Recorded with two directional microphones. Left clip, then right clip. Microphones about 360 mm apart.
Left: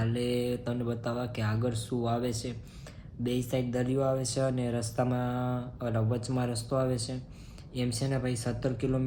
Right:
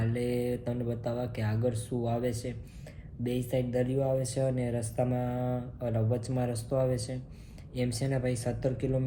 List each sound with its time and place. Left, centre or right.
0.0 s speech: centre